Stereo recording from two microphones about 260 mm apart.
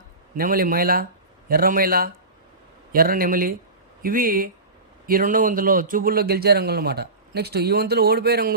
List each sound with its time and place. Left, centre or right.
0.3 s a man's voice: right